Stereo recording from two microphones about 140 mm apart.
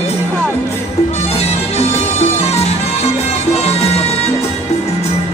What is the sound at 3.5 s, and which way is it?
Music, 45° left (ahead or behind).